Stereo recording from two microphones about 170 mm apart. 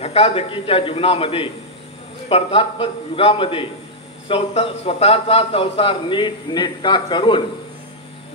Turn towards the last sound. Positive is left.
turn(degrees=30)  # may be behind; listen again after turning